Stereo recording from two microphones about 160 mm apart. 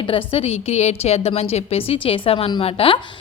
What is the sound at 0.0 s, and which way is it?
A woman's voice, 35° left (ahead or behind).